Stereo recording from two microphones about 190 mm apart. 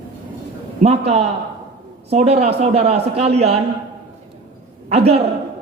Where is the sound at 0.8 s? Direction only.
35° right (ahead or behind).